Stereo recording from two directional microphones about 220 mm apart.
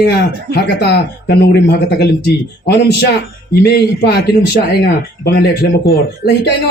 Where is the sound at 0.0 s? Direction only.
50° left (ahead or behind).